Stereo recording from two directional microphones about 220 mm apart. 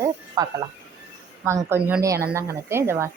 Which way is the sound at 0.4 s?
15° right (ahead or behind).